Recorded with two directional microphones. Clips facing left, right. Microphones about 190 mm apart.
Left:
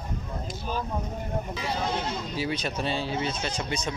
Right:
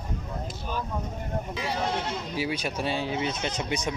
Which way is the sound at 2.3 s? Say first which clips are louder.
Right 1 dB; 10° right (ahead or behind).